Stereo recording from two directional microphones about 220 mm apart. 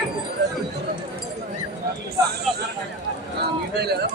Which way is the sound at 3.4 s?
45° right (ahead or behind).